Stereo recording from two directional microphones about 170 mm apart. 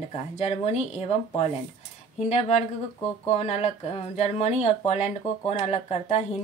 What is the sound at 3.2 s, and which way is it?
A woman's voice, 40° left (ahead or behind).